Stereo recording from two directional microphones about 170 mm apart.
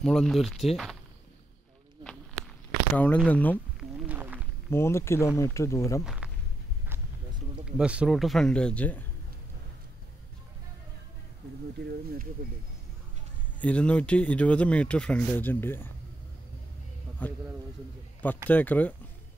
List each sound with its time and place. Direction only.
0.0 s speech: centre (ahead or behind)
2.9 s speech: 10° left (ahead or behind)
4.1 s a sound: 10° right (ahead or behind)
4.6 s speech: 15° left (ahead or behind)
6.0 s walk: 5° right (ahead or behind)
7.6 s speech: 5° right (ahead or behind)
11.8 s speech: 75° right (ahead or behind)
13.6 s speech: 5° left (ahead or behind)
17.2 s speech: 10° left (ahead or behind)
18.5 s speech: 10° left (ahead or behind)